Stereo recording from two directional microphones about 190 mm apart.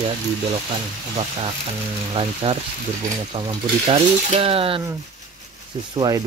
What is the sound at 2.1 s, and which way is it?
Speech, 30° right (ahead or behind).